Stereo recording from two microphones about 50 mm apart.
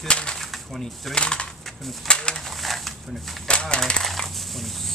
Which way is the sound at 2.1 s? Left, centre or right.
Centre.